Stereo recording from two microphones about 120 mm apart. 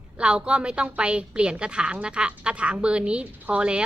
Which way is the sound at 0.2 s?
10° right (ahead or behind).